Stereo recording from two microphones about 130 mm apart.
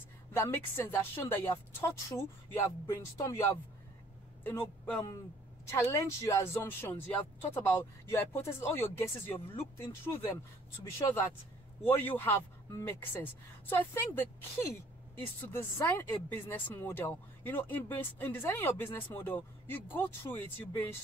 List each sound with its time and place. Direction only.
0.3 s a man's voice: 15° left (ahead or behind)